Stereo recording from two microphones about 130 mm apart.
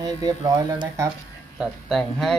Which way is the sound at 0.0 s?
30° right (ahead or behind).